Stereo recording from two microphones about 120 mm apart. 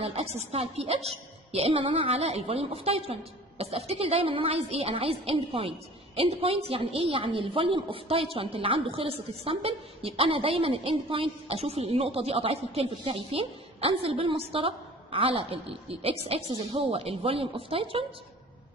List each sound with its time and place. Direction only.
0.0 s a woman's voice: 55° right (ahead or behind)